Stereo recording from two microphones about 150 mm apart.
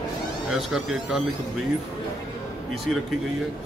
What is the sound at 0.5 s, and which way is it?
Speech, 5° right (ahead or behind).